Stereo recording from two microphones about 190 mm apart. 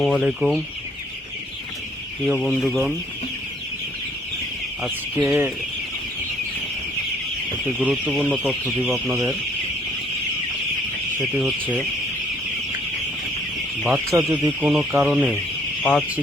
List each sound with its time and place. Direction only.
0.0 s speech: centre (ahead or behind)
2.2 s chicken: centre (ahead or behind)
4.8 s speech: 10° right (ahead or behind)
7.8 s speech: 5° right (ahead or behind)
11.2 s chicken: centre (ahead or behind)
14.1 s speech: 20° right (ahead or behind)
14.6 s speech: 10° right (ahead or behind)